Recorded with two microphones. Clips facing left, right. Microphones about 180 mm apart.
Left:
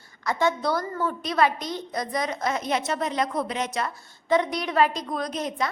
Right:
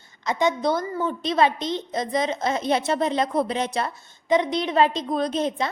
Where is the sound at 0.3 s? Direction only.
20° right (ahead or behind).